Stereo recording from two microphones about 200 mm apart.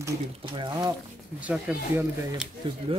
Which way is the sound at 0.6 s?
20° right (ahead or behind).